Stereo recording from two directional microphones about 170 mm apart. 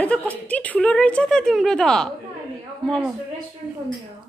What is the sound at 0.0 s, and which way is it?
A woman's voice, 10° left (ahead or behind).